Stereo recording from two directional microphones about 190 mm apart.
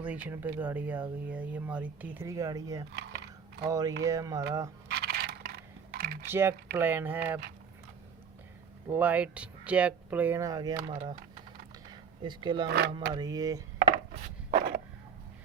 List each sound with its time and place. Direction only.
0.0 s speech: 10° right (ahead or behind)
2.9 s typing: 60° right (ahead or behind)
3.7 s speech: 20° right (ahead or behind)
4.9 s a sound: 60° right (ahead or behind)
6.2 s speech: 10° right (ahead or behind)
8.9 s speech: 10° right (ahead or behind); by 11.2 s 30° right (ahead or behind)
11.9 s a sound: 25° right (ahead or behind)
12.6 s speech: 60° right (ahead or behind)
13.1 s speech: 20° right (ahead or behind)
13.7 s a sound: 35° right (ahead or behind)